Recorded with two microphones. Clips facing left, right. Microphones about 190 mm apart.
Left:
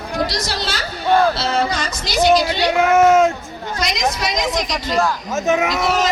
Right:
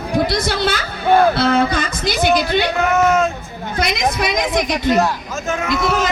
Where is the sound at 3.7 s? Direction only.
55° right (ahead or behind).